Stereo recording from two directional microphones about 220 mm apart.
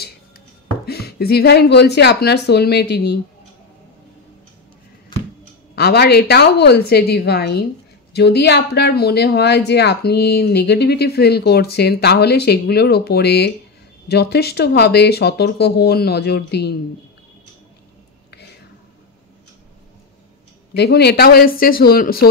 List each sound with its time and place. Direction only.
0.8 s speech: 45° left (ahead or behind)
5.8 s speech: 45° left (ahead or behind)
20.7 s speech: 50° left (ahead or behind)